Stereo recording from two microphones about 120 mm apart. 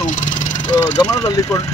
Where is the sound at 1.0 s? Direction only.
30° left (ahead or behind).